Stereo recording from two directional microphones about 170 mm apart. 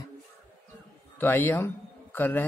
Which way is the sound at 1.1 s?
10° left (ahead or behind).